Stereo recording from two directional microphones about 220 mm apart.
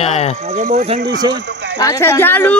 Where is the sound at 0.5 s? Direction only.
35° right (ahead or behind).